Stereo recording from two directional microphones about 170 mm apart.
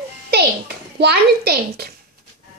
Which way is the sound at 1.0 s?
70° right (ahead or behind).